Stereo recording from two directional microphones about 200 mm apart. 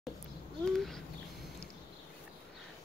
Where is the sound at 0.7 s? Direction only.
5° left (ahead or behind).